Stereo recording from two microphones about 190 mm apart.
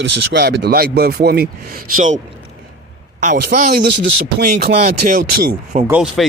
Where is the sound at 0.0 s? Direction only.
60° right (ahead or behind); by 2.2 s 40° right (ahead or behind).